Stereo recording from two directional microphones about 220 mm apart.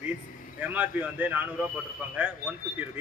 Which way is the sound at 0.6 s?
5° right (ahead or behind).